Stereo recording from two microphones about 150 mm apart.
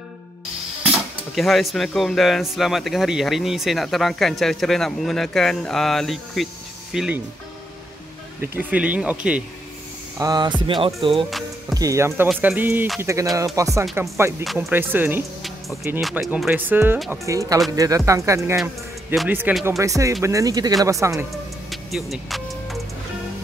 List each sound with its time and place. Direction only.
0.9 s speech: centre (ahead or behind)
8.4 s speech: 10° right (ahead or behind)
10.1 s speech: 25° right (ahead or behind)
11.0 s music: 40° right (ahead or behind)
11.7 s speech: 20° right (ahead or behind)
14.4 s speech: centre (ahead or behind)
14.7 s speech: 15° right (ahead or behind)
16.0 s speech: centre (ahead or behind)
16.4 s speech: 10° right (ahead or behind)
21.6 s music: centre (ahead or behind)